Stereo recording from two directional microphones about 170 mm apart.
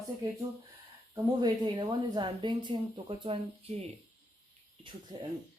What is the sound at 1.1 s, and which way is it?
Speech, 25° right (ahead or behind).